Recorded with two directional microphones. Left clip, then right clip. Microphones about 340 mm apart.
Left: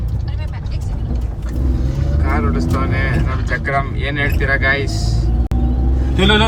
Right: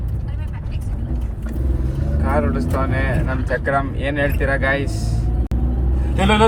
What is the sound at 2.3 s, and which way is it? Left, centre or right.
Speech, centre.